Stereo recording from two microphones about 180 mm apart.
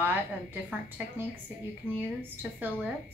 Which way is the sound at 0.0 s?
10° right (ahead or behind).